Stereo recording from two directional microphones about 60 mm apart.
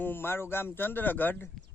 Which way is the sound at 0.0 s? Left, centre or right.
Left.